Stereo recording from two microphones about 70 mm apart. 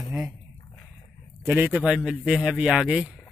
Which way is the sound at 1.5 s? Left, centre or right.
Right.